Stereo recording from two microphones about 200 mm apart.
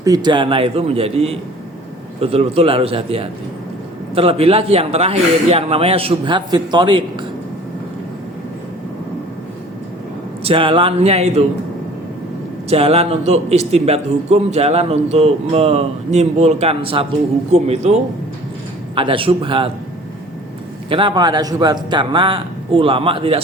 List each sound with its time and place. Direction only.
0.0 s speech: 20° right (ahead or behind)
10.4 s speech: 25° right (ahead or behind)
12.7 s a man's voice: 30° right (ahead or behind)
18.9 s speech: 25° right (ahead or behind)
20.9 s speech: 25° right (ahead or behind)